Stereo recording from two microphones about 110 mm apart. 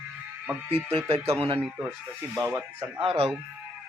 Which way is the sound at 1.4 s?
60° right (ahead or behind).